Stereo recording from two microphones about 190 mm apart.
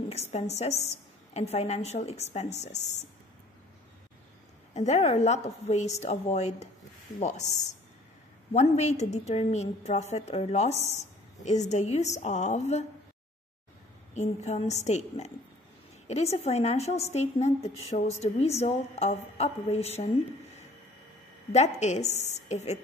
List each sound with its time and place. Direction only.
0.1 s a woman's voice: 35° left (ahead or behind)
4.7 s a woman's voice: 35° left (ahead or behind)
14.1 s a woman's voice: 35° left (ahead or behind)
21.5 s a woman's voice: 35° left (ahead or behind)